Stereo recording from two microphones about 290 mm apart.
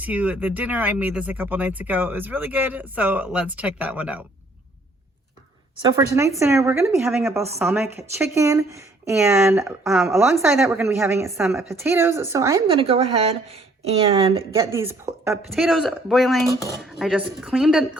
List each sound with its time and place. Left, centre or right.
0.0 s speech: centre
6.4 s speech: centre